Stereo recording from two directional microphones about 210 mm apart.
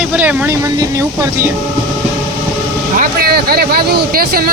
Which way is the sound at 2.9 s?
45° right (ahead or behind).